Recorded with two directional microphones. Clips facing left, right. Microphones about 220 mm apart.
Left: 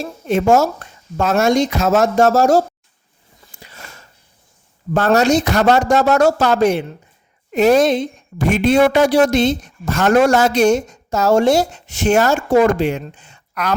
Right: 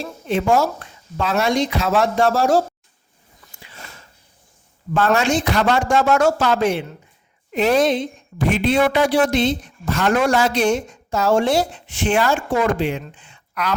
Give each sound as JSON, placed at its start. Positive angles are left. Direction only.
{"t": 0.0, "sound": "a woman's voice", "side_deg": 45}
{"t": 4.9, "sound": "a woman's voice", "side_deg": 40}